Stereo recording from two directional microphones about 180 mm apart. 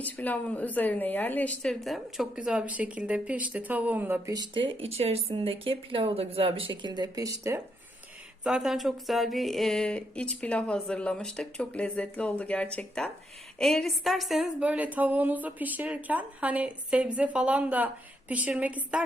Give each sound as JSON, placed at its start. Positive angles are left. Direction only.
{"t": 0.0, "sound": "speech", "side_deg": 10}
{"t": 4.7, "sound": "speech", "side_deg": -35}
{"t": 8.4, "sound": "a woman's voice", "side_deg": -5}